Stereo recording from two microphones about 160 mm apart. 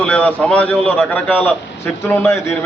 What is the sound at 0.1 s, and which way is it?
A man's voice, 10° left (ahead or behind).